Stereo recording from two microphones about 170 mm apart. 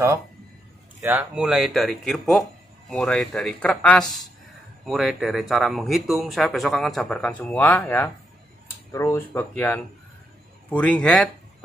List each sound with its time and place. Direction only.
1.0 s speech: 10° right (ahead or behind)